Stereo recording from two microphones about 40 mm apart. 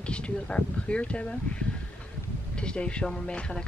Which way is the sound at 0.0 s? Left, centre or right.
Left.